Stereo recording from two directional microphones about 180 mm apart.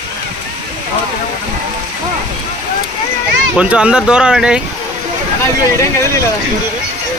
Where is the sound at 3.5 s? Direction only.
5° right (ahead or behind).